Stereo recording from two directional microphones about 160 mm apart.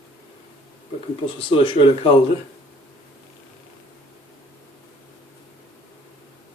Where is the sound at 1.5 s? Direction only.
35° left (ahead or behind).